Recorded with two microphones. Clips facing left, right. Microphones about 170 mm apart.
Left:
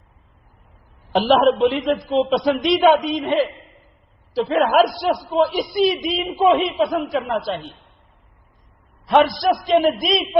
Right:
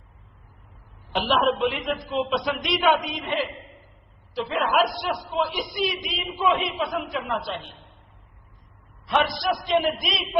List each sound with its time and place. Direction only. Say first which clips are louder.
1.2 s a man's voice: left 7 dB; 35° left (ahead or behind)
4.4 s a man's voice: left 7 dB; 40° left (ahead or behind)
9.0 s a man's voice: left 8 dB; 40° left (ahead or behind)